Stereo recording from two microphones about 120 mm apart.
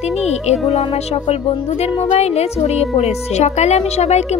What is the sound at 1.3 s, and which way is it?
A woman's voice, 55° left (ahead or behind).